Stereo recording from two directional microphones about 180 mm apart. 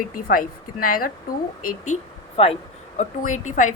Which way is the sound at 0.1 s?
50° left (ahead or behind).